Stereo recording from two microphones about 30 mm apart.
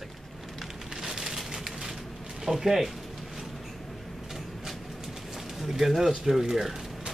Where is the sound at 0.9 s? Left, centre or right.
Centre.